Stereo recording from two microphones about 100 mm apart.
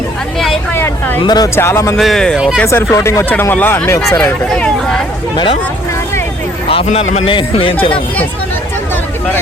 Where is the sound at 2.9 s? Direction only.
30° left (ahead or behind).